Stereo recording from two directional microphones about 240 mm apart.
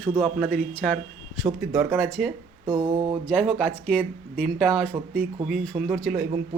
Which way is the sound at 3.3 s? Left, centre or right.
Centre.